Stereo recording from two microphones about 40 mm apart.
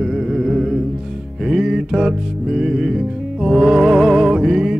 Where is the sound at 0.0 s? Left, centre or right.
Centre.